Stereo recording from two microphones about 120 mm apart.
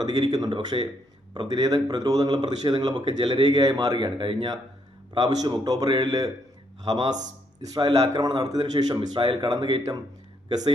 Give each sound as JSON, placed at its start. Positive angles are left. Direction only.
{"t": 0.0, "sound": "speech", "side_deg": -30}
{"t": 0.7, "sound": "speech", "side_deg": -45}
{"t": 1.3, "sound": "speech", "side_deg": -35}
{"t": 5.1, "sound": "speech", "side_deg": -30}
{"t": 9.0, "sound": "speech", "side_deg": -45}